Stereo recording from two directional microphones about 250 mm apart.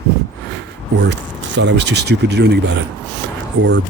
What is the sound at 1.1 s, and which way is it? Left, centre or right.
Speech, right.